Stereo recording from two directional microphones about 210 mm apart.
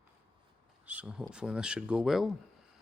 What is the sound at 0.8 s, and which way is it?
Speech, 5° right (ahead or behind).